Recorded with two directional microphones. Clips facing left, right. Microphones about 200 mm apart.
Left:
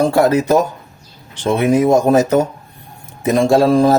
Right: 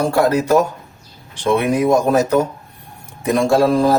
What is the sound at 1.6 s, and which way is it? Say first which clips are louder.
Speech: left 6 dB; 30° left (ahead or behind).